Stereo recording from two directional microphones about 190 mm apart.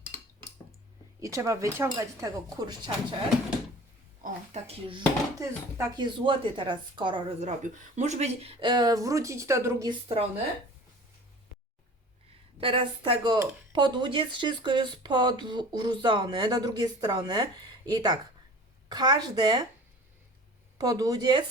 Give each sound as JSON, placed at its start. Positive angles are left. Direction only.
{"t": 0.0, "sound": "cutlery", "side_deg": 10}
{"t": 1.2, "sound": "speech", "side_deg": -15}
{"t": 4.2, "sound": "speech", "side_deg": -40}
{"t": 4.9, "sound": "speech", "side_deg": -25}
{"t": 5.7, "sound": "speech", "side_deg": -15}
{"t": 6.1, "sound": "speech", "side_deg": -25}
{"t": 7.6, "sound": "speech", "side_deg": -40}
{"t": 12.5, "sound": "speech", "side_deg": -25}
{"t": 20.7, "sound": "speech", "side_deg": -20}